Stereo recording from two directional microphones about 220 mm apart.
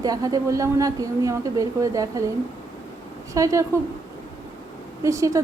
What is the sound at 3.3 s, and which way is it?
Speech, 15° right (ahead or behind).